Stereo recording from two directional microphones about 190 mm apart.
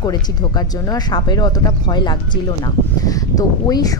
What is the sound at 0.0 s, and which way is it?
Speech, 20° left (ahead or behind).